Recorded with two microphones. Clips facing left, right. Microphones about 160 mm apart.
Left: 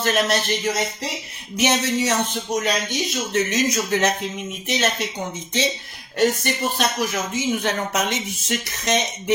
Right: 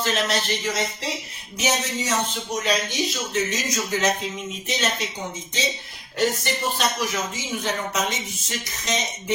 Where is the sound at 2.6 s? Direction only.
55° left (ahead or behind).